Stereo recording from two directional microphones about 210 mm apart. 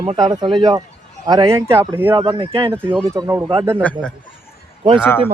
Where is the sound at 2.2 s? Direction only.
20° right (ahead or behind).